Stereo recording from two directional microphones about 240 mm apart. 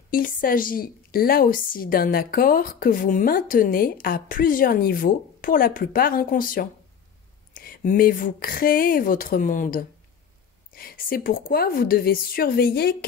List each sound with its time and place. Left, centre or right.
0.1 s a woman's voice: left